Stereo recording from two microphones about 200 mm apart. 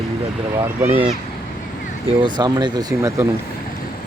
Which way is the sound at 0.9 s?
25° right (ahead or behind).